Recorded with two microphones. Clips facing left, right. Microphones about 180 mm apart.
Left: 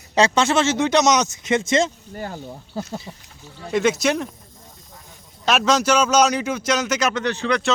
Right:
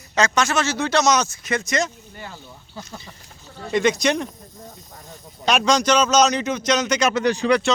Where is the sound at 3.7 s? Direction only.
5° left (ahead or behind).